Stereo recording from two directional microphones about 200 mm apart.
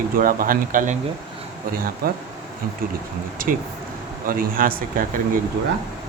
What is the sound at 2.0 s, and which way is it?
Speech, 45° right (ahead or behind).